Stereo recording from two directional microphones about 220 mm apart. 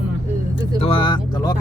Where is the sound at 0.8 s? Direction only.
25° left (ahead or behind).